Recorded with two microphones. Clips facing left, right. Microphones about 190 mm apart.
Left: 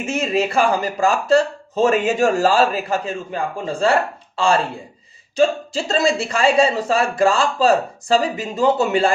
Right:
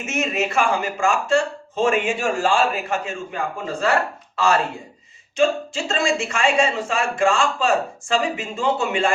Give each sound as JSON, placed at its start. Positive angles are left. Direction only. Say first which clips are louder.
{"t": 0.0, "sound": "speech", "louder": "left 4 dB", "side_deg": 35}